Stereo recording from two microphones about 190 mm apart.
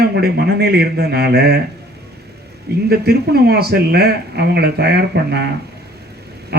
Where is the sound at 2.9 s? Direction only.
55° right (ahead or behind).